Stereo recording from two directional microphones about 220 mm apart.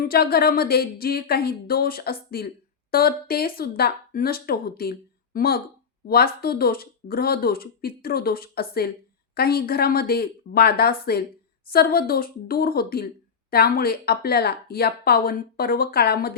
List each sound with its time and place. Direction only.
0.0 s speech: 45° left (ahead or behind)